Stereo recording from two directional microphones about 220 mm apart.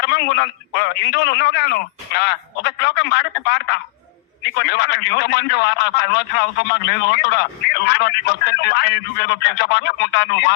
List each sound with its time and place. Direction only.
0.0 s a man's voice: 50° left (ahead or behind)